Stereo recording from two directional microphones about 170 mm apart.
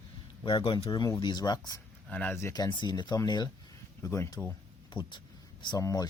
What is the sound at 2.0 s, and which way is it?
Speech, 10° left (ahead or behind).